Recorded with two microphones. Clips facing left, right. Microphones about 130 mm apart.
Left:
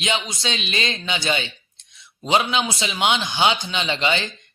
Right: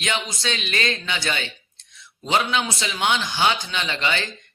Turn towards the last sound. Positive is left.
turn(degrees=20)  # may be behind; listen again after turning